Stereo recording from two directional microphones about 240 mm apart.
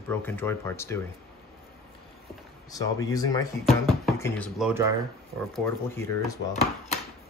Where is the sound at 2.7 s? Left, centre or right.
Centre.